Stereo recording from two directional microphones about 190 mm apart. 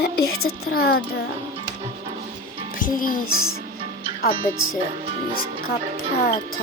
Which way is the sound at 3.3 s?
90° left.